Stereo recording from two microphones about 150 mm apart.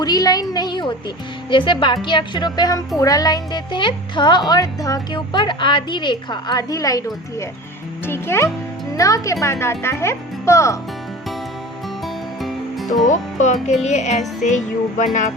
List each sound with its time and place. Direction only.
0.0 s a woman's voice: 25° left (ahead or behind)
12.0 s music: centre (ahead or behind)
13.1 s music: 50° left (ahead or behind)